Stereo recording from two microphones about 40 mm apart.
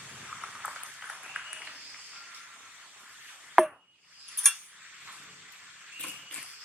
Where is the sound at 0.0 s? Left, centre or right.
Right.